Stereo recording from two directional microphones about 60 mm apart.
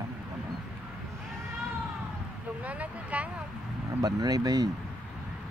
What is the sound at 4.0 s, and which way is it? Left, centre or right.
Speech, right.